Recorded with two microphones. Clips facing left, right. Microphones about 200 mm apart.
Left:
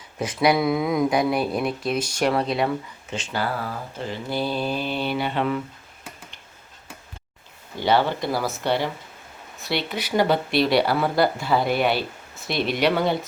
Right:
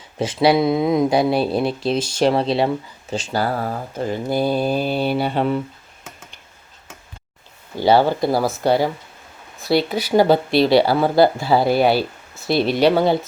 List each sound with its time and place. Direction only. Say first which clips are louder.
0.2 s speech: right 4 dB; 25° right (ahead or behind)
7.8 s speech: right 6 dB; 35° right (ahead or behind)